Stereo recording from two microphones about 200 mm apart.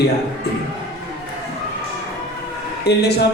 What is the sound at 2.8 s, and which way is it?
Speech, 55° left (ahead or behind).